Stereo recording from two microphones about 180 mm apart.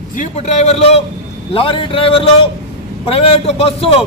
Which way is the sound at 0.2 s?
40° left (ahead or behind).